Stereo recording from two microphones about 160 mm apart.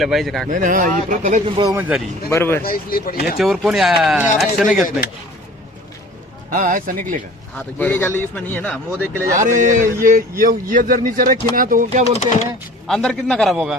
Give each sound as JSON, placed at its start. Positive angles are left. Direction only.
{"t": 0.0, "sound": "speech", "side_deg": 0}
{"t": 0.5, "sound": "speech", "side_deg": -55}
{"t": 1.6, "sound": "speech", "side_deg": -30}
{"t": 2.3, "sound": "a man's voice", "side_deg": 15}
{"t": 2.6, "sound": "speech", "side_deg": 65}
{"t": 3.3, "sound": "speech", "side_deg": 0}
{"t": 6.5, "sound": "speech", "side_deg": -55}
{"t": 7.5, "sound": "a man's voice", "side_deg": 10}
{"t": 9.3, "sound": "speech", "side_deg": -55}
{"t": 12.1, "sound": "speech", "side_deg": 40}
{"t": 12.9, "sound": "speech", "side_deg": 0}